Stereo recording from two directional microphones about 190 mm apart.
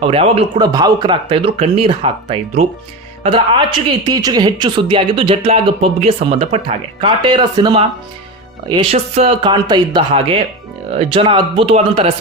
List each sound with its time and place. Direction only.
0.0 s speech: 30° right (ahead or behind)